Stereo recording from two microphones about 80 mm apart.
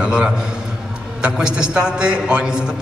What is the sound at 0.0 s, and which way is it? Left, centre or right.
A man's voice, centre.